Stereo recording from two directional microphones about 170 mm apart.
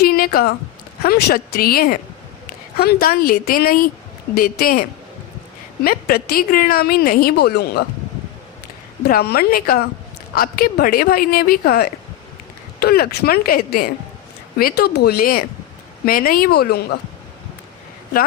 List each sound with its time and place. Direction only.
0.0 s a sound: 65° left (ahead or behind)
1.0 s a woman's voice: 65° left (ahead or behind)
9.0 s a woman's voice: 65° left (ahead or behind)